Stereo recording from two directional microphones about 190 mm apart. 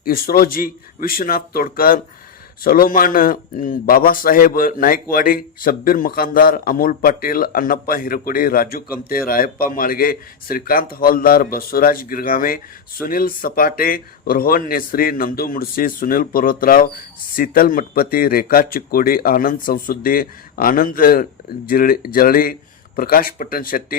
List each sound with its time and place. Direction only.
0.0 s a man's voice: 50° left (ahead or behind)